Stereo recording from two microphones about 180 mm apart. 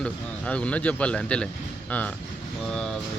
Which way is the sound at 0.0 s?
5° left (ahead or behind).